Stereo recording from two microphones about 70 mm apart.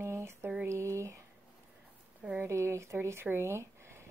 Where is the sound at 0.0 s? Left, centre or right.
Right.